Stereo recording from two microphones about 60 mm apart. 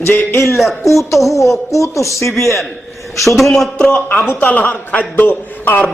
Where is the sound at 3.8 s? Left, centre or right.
Left.